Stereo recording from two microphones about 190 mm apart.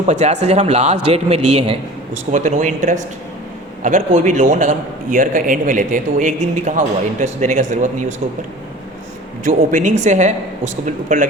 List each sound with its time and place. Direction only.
0.0 s speech: 35° right (ahead or behind)
9.4 s speech: 45° right (ahead or behind)